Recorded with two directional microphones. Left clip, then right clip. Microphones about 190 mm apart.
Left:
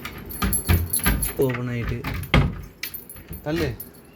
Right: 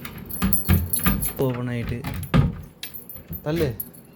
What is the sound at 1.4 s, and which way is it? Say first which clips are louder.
Keys jangling: left 2 dB; 10° right (ahead or behind).